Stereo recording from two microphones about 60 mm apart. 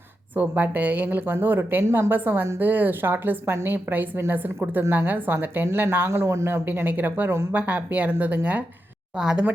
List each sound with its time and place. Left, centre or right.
0.3 s speech: right
9.1 s speech: centre